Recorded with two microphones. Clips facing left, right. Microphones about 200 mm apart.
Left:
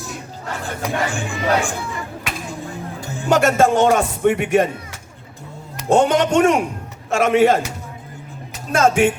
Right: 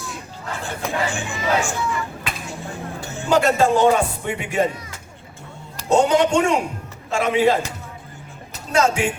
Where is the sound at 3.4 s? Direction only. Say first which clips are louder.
Left 2 dB; 90° left.